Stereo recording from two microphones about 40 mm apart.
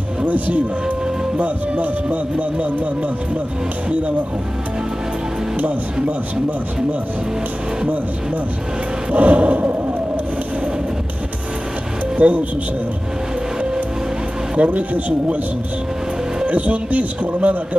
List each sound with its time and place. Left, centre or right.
0.2 s speech: right
9.1 s speech: right
12.2 s speech: right
14.6 s speech: right
16.4 s speech: right